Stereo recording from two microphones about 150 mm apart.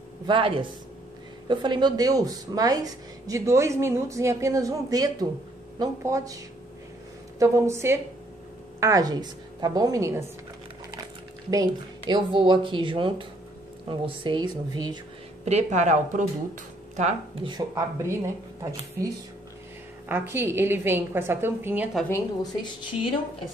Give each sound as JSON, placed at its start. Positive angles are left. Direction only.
{"t": 0.3, "sound": "a woman's voice", "side_deg": -35}
{"t": 11.5, "sound": "speech", "side_deg": -25}
{"t": 15.4, "sound": "speech", "side_deg": -50}
{"t": 17.4, "sound": "a woman's voice", "side_deg": -30}
{"t": 20.1, "sound": "a woman's voice", "side_deg": -15}
{"t": 22.1, "sound": "a woman's voice", "side_deg": 25}